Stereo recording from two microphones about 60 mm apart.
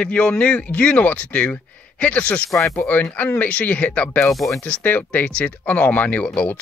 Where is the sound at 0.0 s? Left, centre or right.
Left.